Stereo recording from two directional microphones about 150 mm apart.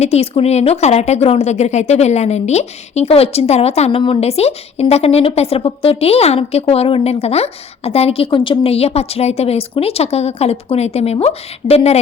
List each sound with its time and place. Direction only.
0.0 s a woman's voice: 45° left (ahead or behind)